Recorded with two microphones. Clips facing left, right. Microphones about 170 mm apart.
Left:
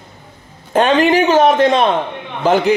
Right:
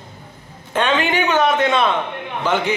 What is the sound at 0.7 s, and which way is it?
A man's voice, 40° left (ahead or behind).